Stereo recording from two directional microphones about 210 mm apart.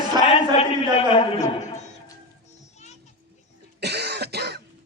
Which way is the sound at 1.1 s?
35° left (ahead or behind).